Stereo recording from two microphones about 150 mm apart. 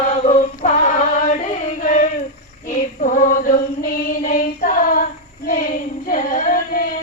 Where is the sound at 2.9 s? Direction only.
60° left (ahead or behind).